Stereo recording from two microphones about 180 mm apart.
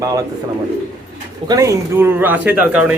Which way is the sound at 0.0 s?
20° right (ahead or behind).